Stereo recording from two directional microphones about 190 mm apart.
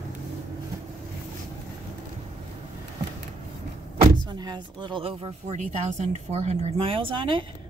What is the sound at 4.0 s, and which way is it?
Speech, 25° right (ahead or behind).